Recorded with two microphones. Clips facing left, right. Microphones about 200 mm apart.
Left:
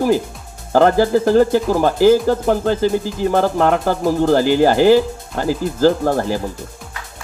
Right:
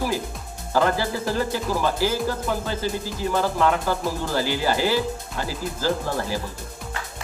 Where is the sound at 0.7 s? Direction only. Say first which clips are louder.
Left 9 dB; 45° left (ahead or behind).